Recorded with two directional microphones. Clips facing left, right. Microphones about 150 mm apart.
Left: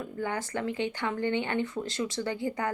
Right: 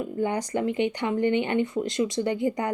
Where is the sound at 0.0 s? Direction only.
20° right (ahead or behind).